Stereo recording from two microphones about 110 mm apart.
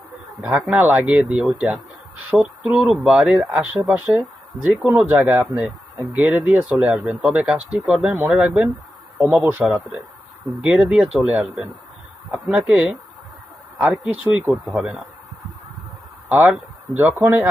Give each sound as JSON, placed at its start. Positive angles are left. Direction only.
{"t": 0.4, "sound": "speech", "side_deg": -10}
{"t": 14.5, "sound": "speech", "side_deg": 0}
{"t": 16.3, "sound": "speech", "side_deg": -15}